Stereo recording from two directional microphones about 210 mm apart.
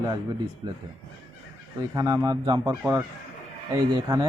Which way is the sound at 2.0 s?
20° right (ahead or behind).